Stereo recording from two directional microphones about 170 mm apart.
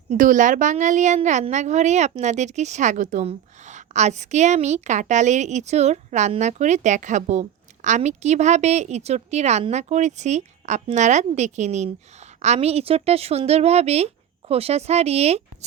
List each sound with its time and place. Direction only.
0.1 s a woman's voice: 50° right (ahead or behind)